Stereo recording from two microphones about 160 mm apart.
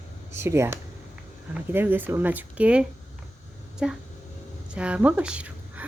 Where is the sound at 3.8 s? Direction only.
5° right (ahead or behind).